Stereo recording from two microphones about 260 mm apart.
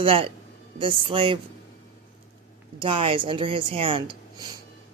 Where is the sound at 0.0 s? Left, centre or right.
Right.